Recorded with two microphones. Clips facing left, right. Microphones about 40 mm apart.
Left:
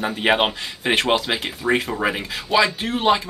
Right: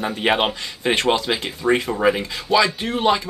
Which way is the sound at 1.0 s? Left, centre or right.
Left.